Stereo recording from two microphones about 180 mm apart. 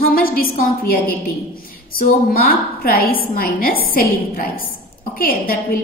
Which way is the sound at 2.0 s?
55° left (ahead or behind).